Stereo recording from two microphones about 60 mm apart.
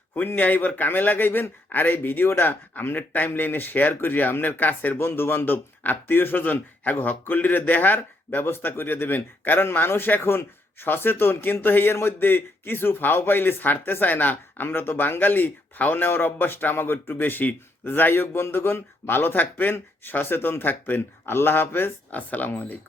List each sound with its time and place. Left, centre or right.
0.1 s speech: left
4.9 s speech: left